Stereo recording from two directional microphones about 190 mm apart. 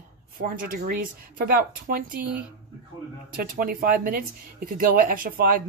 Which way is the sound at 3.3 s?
50° right (ahead or behind).